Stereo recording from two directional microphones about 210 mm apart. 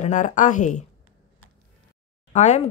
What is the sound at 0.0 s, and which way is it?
Speech, 35° left (ahead or behind).